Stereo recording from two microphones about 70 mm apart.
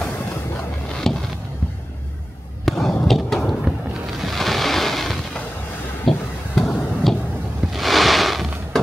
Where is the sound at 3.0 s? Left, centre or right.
Centre.